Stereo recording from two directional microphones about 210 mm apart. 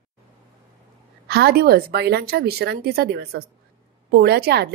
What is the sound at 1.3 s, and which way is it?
Speech, 50° right (ahead or behind).